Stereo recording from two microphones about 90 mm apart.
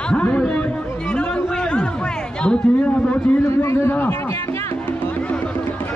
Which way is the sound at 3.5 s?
30° left (ahead or behind).